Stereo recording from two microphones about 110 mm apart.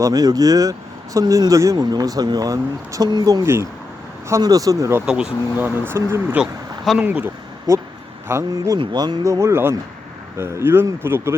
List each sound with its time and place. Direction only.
0.0 s speech: 35° right (ahead or behind)
3.4 s speech: 25° right (ahead or behind)
5.0 s speech: 5° right (ahead or behind)
5.5 s speech: 20° right (ahead or behind)
6.4 s speech: centre (ahead or behind)
7.0 s speech: 15° right (ahead or behind)
8.3 s speech: 25° right (ahead or behind)
8.8 s speech: 40° right (ahead or behind)
9.2 s speech: 25° right (ahead or behind)